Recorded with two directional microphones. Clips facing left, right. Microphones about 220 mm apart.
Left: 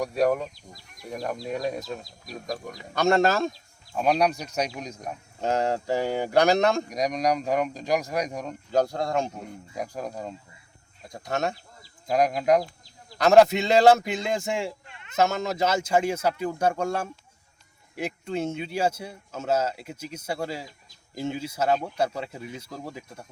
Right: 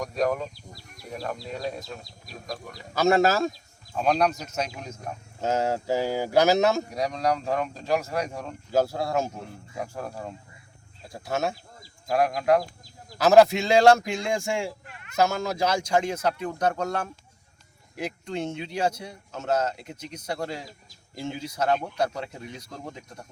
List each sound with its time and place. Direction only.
0.0 s speech: 10° left (ahead or behind)
2.9 s a man's voice: 5° right (ahead or behind)
3.9 s speech: 10° left (ahead or behind)
5.4 s speech: 5° right (ahead or behind)
6.9 s speech: 15° left (ahead or behind)
8.7 s a man's voice: 5° right (ahead or behind)
9.4 s speech: 15° left (ahead or behind)
11.1 s a man's voice: centre (ahead or behind)
12.0 s speech: 15° left (ahead or behind)
13.1 s a man's voice: centre (ahead or behind)